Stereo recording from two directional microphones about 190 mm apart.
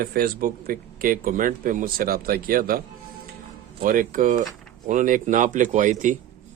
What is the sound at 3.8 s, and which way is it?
A man's voice, 45° right (ahead or behind).